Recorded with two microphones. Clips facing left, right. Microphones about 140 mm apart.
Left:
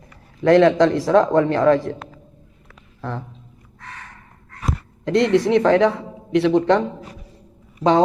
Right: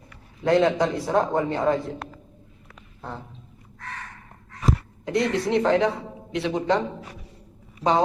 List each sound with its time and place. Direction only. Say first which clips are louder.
0.4 s a man's voice: left 7 dB; 75° left (ahead or behind)
3.0 s speech: left 7 dB; 75° left (ahead or behind)
5.0 s speech: left 7 dB; 65° left (ahead or behind)